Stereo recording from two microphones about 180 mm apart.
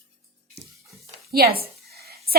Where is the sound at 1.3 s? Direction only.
55° right (ahead or behind).